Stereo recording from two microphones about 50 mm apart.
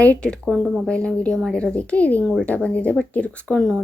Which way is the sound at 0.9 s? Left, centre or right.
Left.